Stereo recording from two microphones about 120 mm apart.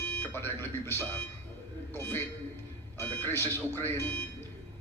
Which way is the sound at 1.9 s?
20° left (ahead or behind).